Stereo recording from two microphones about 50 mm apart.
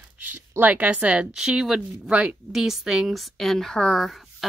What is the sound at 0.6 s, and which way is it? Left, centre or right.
Speech, right.